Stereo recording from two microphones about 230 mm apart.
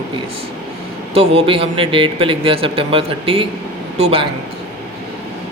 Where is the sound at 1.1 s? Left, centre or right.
Right.